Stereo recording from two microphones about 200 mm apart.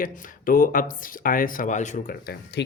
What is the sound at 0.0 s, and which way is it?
Speech, 45° left (ahead or behind).